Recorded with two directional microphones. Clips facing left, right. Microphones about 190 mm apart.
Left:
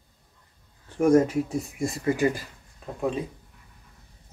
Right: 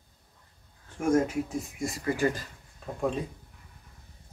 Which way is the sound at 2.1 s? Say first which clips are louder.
Left 2 dB; 15° left (ahead or behind).